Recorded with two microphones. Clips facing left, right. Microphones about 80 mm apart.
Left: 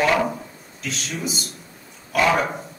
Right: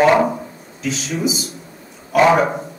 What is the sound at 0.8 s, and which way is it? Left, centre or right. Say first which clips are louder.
A man's voice: right 8 dB; centre.